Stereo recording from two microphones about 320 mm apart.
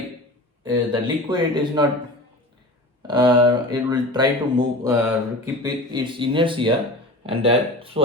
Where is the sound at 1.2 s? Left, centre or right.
Centre.